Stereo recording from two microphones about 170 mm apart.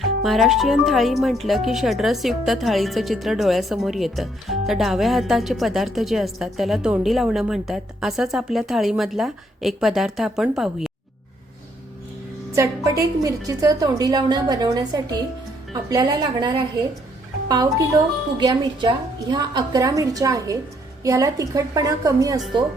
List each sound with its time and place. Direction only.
0.2 s speech: centre (ahead or behind)
12.5 s a woman's voice: 20° right (ahead or behind)